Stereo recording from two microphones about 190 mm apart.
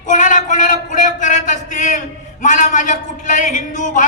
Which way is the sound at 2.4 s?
40° left (ahead or behind).